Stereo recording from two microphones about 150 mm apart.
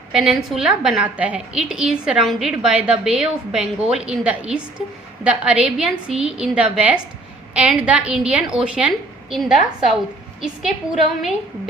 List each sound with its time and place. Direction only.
0.1 s a woman's voice: 5° right (ahead or behind)
10.4 s a woman's voice: 5° right (ahead or behind)